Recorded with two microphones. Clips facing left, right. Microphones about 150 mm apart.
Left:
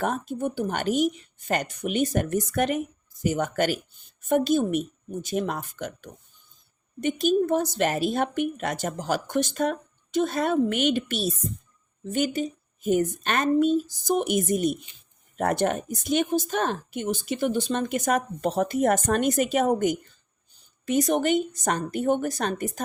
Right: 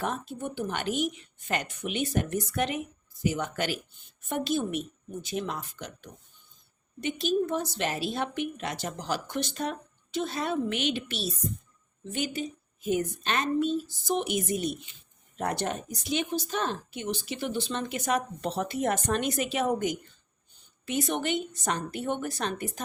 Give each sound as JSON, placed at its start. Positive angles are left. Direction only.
{"t": 0.0, "sound": "speech", "side_deg": 45}